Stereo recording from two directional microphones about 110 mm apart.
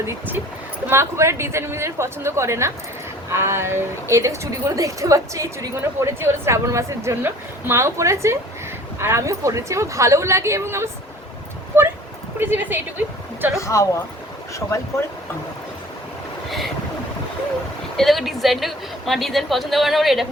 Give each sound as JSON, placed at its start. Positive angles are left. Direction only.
{"t": 0.0, "sound": "a woman's voice", "side_deg": -20}
{"t": 11.7, "sound": "a sound", "side_deg": -20}
{"t": 12.4, "sound": "a woman's voice", "side_deg": -20}
{"t": 13.6, "sound": "speech", "side_deg": 30}
{"t": 17.9, "sound": "speech", "side_deg": 0}